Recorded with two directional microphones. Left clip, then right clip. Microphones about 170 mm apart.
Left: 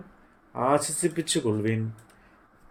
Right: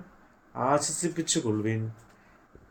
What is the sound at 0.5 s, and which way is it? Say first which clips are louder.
Mantra: left 2 dB; 55° left (ahead or behind).